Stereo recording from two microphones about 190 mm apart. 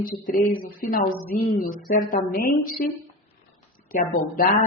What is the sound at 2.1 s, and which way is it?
A woman's voice, 50° left (ahead or behind).